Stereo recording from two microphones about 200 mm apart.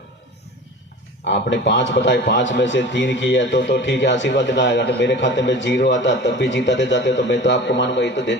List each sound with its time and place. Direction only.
1.2 s a man's voice: 65° left (ahead or behind)